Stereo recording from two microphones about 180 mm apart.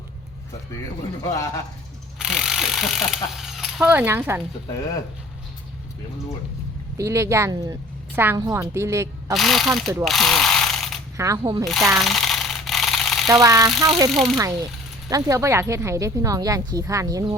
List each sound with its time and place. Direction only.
2.1 s speech: 5° right (ahead or behind)
6.9 s speech: 15° right (ahead or behind)
9.3 s speech: centre (ahead or behind)
10.0 s ratchet: centre (ahead or behind)
11.2 s speech: 20° right (ahead or behind)
11.6 s speech: centre (ahead or behind)
11.9 s a sound: centre (ahead or behind)
13.3 s speech: 20° right (ahead or behind)
14.1 s speech: centre (ahead or behind)
14.3 s speech: 15° right (ahead or behind)